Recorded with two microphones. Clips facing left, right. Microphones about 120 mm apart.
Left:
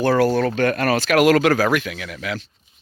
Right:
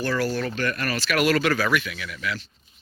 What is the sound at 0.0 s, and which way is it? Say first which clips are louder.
Speech: left 8 dB; 60° left (ahead or behind).